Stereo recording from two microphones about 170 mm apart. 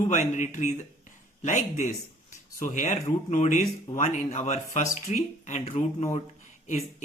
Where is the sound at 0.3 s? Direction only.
45° left (ahead or behind).